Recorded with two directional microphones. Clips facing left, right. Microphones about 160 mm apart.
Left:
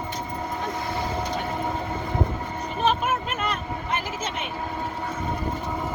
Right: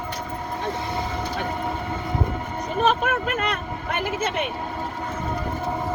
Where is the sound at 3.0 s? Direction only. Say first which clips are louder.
Right 2 dB; 60° right (ahead or behind).